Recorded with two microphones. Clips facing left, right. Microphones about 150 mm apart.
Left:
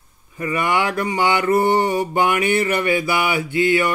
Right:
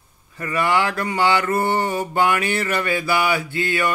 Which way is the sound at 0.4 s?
15° left (ahead or behind).